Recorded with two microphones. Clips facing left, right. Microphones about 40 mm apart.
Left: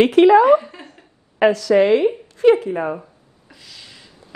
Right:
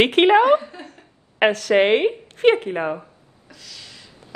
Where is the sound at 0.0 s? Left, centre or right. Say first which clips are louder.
Left 3 dB; right.